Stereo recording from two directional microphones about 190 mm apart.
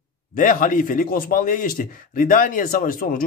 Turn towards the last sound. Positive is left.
turn(degrees=45)  # may be behind; listen again after turning